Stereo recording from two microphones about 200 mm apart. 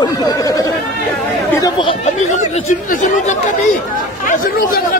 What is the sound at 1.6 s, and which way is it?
Chatter, 25° left (ahead or behind).